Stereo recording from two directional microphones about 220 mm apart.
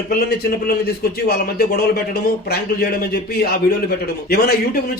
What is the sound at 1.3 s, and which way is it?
Speech, 45° left (ahead or behind).